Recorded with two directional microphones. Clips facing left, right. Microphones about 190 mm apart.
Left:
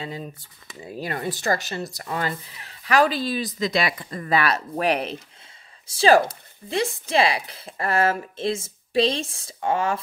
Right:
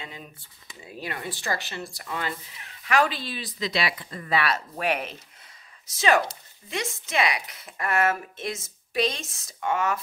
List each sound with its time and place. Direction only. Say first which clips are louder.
0.0 s speech: left 8 dB; 40° left (ahead or behind)